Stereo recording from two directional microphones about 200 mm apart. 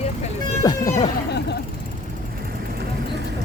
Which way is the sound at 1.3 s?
55° left (ahead or behind).